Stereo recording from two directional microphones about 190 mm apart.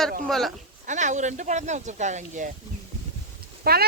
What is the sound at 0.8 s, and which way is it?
Speech, 40° right (ahead or behind).